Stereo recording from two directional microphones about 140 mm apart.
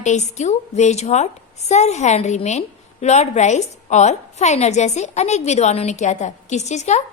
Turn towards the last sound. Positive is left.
turn(degrees=55)  # may be behind; listen again after turning